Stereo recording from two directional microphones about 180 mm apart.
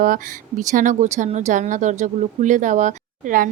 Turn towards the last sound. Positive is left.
turn(degrees=-45)  # may be behind; listen again after turning